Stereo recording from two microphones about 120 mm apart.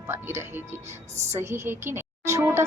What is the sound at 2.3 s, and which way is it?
Music, 25° right (ahead or behind).